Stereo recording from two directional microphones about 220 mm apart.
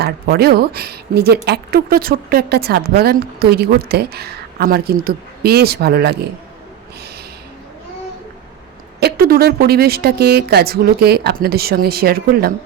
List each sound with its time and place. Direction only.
0.0 s a woman's voice: 45° right (ahead or behind)
9.0 s a woman's voice: 45° right (ahead or behind)